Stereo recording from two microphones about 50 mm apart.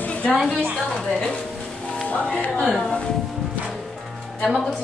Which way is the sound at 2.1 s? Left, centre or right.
Left.